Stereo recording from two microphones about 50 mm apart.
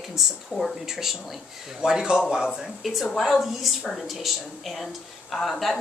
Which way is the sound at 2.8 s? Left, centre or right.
Centre.